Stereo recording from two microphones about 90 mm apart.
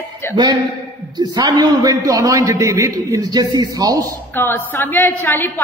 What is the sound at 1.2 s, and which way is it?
A man's voice, 50° right (ahead or behind).